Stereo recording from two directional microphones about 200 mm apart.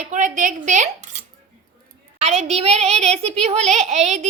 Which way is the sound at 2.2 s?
30° right (ahead or behind).